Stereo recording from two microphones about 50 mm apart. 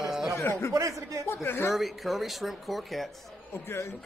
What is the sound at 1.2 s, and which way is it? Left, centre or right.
Speech, left.